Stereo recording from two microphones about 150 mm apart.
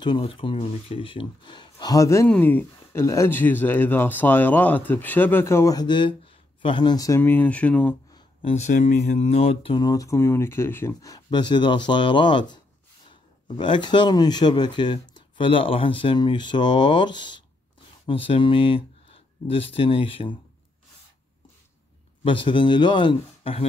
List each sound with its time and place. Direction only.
0.0 s speech: 35° left (ahead or behind)
2.2 s speech: 10° left (ahead or behind); by 7.2 s 25° left (ahead or behind)
7.2 s speech: 15° left (ahead or behind)
8.4 s speech: 45° left (ahead or behind)
9.8 s speech: 20° left (ahead or behind); by 20.3 s 35° left (ahead or behind)
22.2 s speech: 35° left (ahead or behind)